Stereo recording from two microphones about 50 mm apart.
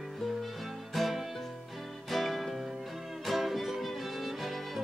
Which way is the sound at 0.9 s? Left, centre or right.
Centre.